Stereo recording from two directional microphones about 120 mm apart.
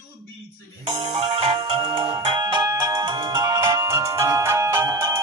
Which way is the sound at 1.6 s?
50° right (ahead or behind).